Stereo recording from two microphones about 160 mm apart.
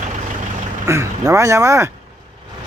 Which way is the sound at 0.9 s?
15° right (ahead or behind).